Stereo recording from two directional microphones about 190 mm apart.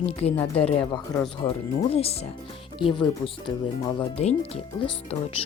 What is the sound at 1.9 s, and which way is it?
Speech, 30° left (ahead or behind).